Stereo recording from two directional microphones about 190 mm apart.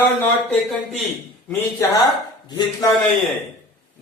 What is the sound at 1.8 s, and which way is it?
Speech, 15° left (ahead or behind).